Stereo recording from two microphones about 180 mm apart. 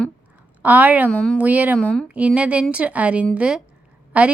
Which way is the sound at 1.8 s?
5° left (ahead or behind).